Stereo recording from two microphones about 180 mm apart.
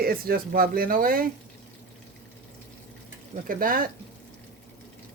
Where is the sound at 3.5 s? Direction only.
50° right (ahead or behind).